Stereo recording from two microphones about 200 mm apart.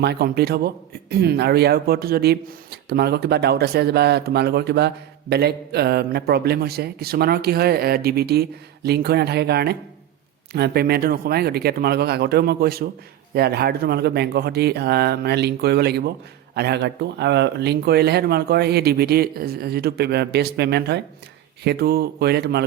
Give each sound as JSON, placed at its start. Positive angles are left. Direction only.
{"t": 0.0, "sound": "speech", "side_deg": -55}